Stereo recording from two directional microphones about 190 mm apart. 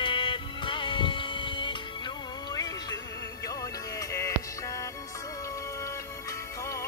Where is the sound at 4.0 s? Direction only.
15° left (ahead or behind).